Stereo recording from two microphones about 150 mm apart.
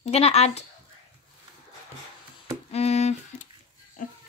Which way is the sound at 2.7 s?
45° left (ahead or behind).